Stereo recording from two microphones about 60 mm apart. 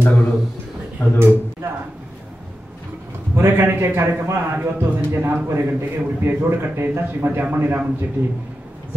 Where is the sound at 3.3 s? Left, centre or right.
Right.